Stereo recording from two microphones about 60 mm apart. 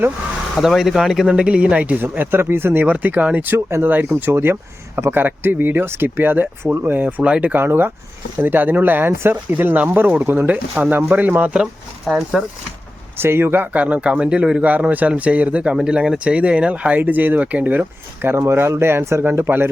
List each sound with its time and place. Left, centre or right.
0.5 s speech: centre; by 2.0 s right
2.0 s speech: right
2.9 s speech: right
3.8 s speech: right
7.5 s speech: right
12.0 s speech: centre
13.1 s speech: right
13.7 s speech: right
15.7 s speech: centre
17.0 s speech: right
18.2 s speech: right
19.2 s speech: right